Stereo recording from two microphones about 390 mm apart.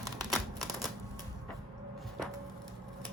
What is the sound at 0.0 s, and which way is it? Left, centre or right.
Typewriter, centre.